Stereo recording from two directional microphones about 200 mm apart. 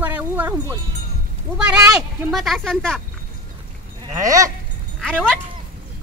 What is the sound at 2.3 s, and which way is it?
Speech, centre (ahead or behind).